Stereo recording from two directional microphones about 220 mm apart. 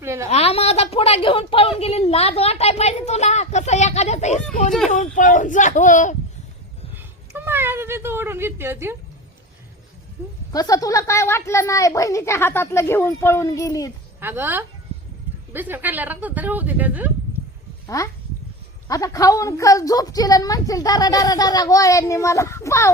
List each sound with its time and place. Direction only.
0.0 s a woman's voice: 10° right (ahead or behind)
0.3 s a woman's voice: 30° left (ahead or behind)
6.9 s cat: 10° right (ahead or behind)
10.5 s a woman's voice: 15° left (ahead or behind)
14.2 s a woman's voice: 10° right (ahead or behind)
17.8 s a woman's voice: 15° left (ahead or behind)